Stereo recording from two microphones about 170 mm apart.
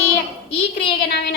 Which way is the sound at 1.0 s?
70° left (ahead or behind).